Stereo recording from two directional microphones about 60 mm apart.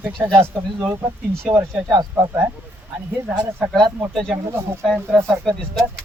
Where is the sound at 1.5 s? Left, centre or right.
Right.